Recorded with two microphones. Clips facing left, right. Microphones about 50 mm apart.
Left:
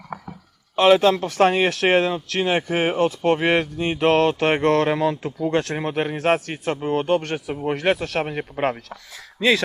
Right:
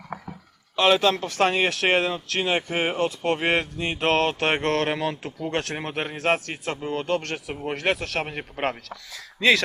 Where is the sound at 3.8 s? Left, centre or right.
Right.